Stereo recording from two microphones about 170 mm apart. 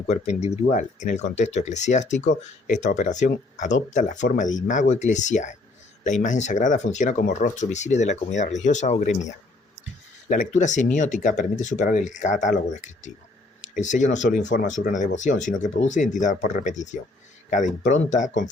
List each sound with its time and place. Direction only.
0.1 s speech: 40° left (ahead or behind)